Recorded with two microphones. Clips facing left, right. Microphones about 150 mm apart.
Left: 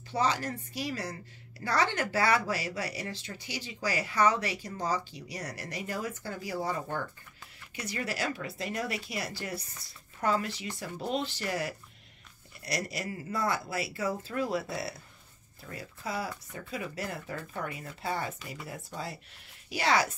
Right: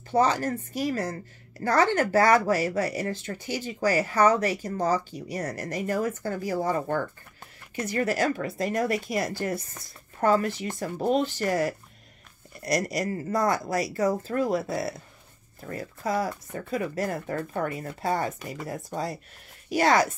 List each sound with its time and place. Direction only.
0.1 s a woman's voice: 45° right (ahead or behind)